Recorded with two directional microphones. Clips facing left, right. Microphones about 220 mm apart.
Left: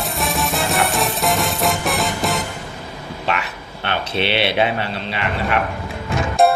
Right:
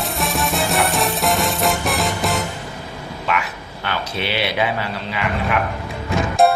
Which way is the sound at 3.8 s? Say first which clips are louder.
Left 3 dB; 25° left (ahead or behind).